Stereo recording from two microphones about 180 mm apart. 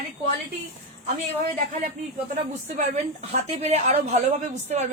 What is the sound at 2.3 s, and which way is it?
A woman's voice, 40° right (ahead or behind).